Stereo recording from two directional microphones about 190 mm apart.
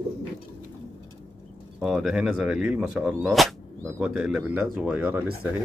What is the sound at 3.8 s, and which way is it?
Speech, 10° right (ahead or behind).